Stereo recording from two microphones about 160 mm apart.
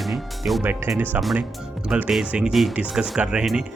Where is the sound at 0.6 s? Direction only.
10° right (ahead or behind).